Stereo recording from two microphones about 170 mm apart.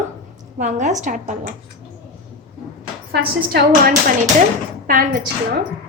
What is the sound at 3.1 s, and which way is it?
Speech, 70° right (ahead or behind).